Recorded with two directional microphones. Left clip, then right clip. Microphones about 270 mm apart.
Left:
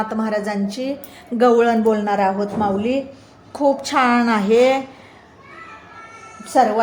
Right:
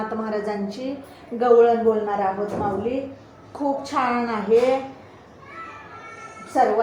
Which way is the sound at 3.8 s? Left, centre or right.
Left.